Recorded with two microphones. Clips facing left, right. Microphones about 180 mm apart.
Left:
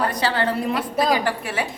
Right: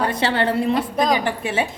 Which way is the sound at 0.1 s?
25° right (ahead or behind).